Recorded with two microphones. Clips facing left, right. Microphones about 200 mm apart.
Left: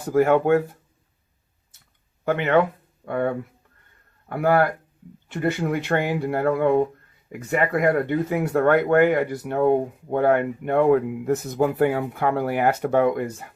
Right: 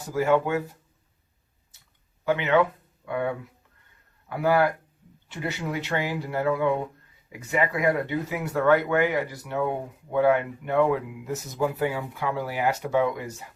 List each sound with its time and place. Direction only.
0.0 s speech: 55° left (ahead or behind)
2.2 s speech: 55° left (ahead or behind)